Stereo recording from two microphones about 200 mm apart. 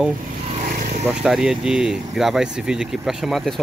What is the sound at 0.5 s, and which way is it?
Vehicle, 40° right (ahead or behind).